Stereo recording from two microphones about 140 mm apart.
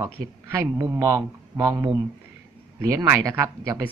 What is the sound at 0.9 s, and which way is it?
Speech, 25° right (ahead or behind).